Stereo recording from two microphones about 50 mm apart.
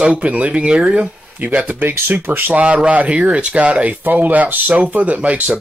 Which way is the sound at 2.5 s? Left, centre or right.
Right.